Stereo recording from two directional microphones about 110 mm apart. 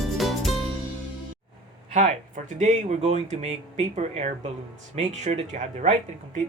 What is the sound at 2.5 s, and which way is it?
Speech, 90° right.